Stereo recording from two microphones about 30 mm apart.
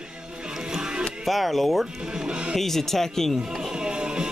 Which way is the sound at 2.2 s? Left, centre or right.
Right.